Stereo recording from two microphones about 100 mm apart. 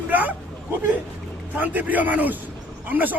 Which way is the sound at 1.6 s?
15° right (ahead or behind).